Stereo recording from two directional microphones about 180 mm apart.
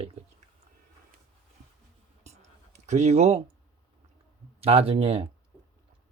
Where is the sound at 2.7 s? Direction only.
40° right (ahead or behind).